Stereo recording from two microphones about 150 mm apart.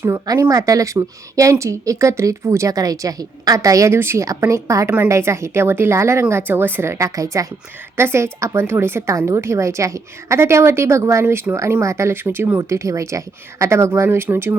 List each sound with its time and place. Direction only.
0.0 s a woman's voice: 20° right (ahead or behind)